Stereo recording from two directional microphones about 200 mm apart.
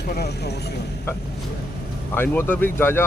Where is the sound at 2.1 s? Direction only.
10° left (ahead or behind).